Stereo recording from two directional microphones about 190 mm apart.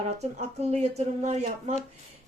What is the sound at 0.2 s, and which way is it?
A woman's voice, 35° right (ahead or behind).